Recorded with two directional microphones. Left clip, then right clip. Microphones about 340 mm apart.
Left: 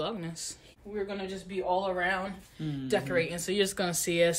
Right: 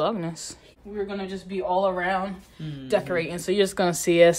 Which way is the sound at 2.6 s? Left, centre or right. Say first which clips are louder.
Left 3 dB; centre.